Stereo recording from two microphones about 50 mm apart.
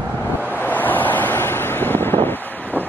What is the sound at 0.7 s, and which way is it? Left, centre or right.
Wind noise, left.